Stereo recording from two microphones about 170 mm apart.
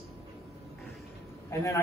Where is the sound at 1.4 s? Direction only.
15° left (ahead or behind).